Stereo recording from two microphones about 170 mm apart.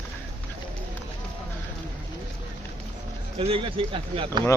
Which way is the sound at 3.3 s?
35° right (ahead or behind).